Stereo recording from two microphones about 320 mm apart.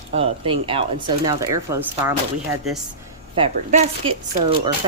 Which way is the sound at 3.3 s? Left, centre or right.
Centre.